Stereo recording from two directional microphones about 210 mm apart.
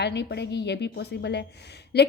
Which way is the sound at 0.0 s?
55° left (ahead or behind).